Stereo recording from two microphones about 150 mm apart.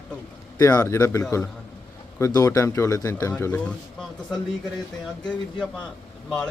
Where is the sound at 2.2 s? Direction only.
20° left (ahead or behind).